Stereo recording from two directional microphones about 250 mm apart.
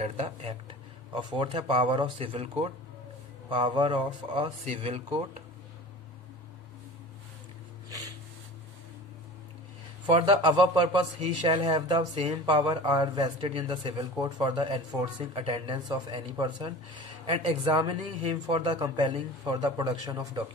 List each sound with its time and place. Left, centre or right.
0.0 s a man's voice: right
10.0 s a man's voice: centre